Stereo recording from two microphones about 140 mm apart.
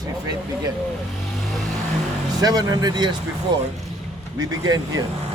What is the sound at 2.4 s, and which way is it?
Speech, 30° right (ahead or behind).